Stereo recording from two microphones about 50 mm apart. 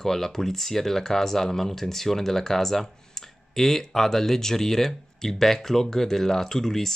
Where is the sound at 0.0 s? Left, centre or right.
Centre.